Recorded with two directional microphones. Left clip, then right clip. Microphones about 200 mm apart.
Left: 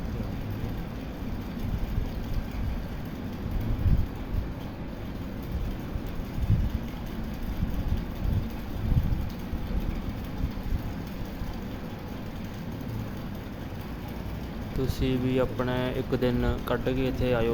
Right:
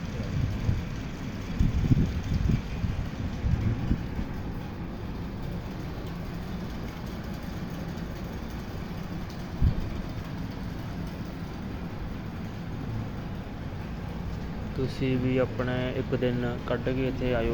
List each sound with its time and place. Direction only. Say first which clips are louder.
15.0 s speech: even; 5° left (ahead or behind)